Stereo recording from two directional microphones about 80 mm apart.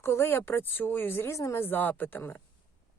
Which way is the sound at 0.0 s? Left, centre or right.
Left.